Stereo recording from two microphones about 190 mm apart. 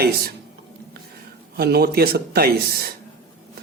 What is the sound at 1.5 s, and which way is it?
Speech, 55° right (ahead or behind).